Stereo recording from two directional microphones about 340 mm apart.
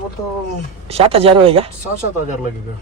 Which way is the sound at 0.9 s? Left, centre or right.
Centre.